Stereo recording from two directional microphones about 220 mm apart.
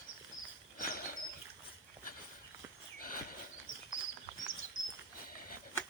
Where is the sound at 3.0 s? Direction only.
40° left (ahead or behind).